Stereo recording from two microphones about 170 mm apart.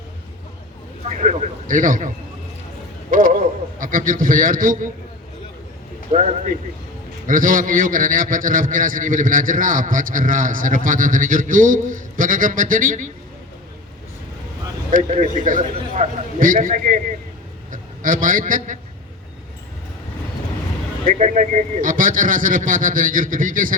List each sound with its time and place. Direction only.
1.0 s a man's voice: 45° right (ahead or behind)
6.1 s a man's voice: 40° right (ahead or behind)
14.9 s a man's voice: 40° right (ahead or behind)
21.0 s a man's voice: 50° right (ahead or behind)